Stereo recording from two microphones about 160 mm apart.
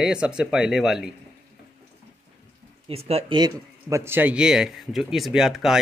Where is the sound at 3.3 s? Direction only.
20° right (ahead or behind).